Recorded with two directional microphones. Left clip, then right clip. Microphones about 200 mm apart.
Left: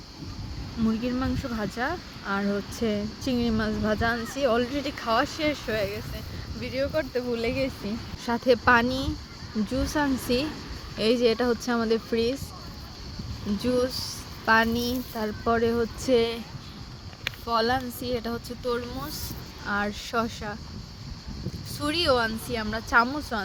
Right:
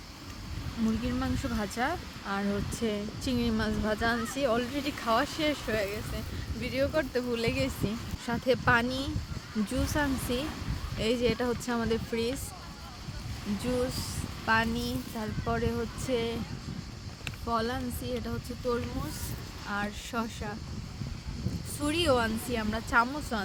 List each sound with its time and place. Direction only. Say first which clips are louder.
1.0 s speech: left 4 dB; 10° left (ahead or behind)
8.2 s speech: left 6 dB; 15° left (ahead or behind)
14.4 s speech: left 6 dB; 25° left (ahead or behind)
17.4 s speech: left 6 dB; 40° left (ahead or behind)
19.6 s speech: left 6 dB; 25° left (ahead or behind)
21.8 s speech: left 3 dB; 25° left (ahead or behind)